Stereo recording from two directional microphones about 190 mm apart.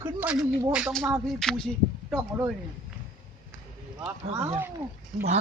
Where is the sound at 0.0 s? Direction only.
10° right (ahead or behind).